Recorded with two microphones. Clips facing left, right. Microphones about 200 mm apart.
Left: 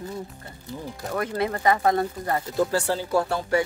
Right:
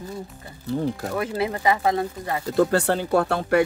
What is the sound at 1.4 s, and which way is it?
Speech, 10° right (ahead or behind).